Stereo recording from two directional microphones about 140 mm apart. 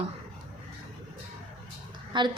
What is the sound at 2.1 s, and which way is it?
Speech, 35° right (ahead or behind).